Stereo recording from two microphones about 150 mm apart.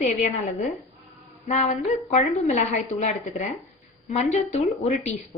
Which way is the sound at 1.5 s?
50° left (ahead or behind).